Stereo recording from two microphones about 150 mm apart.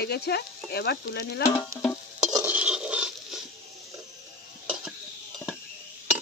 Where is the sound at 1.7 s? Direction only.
20° right (ahead or behind).